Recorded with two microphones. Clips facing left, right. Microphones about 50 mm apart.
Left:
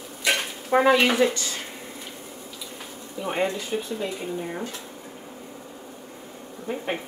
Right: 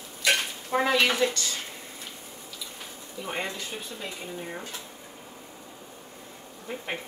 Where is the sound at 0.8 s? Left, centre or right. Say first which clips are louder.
Left 4 dB; centre.